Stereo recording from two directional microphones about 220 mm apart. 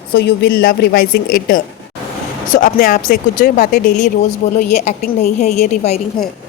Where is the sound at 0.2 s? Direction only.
45° left (ahead or behind).